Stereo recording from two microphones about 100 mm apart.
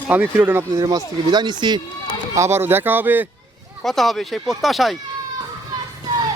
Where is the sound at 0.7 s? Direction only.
40° right (ahead or behind).